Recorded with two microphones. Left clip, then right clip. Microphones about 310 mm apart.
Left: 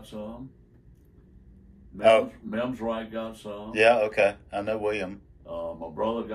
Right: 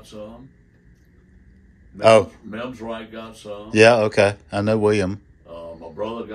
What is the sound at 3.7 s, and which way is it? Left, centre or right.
Speech, right.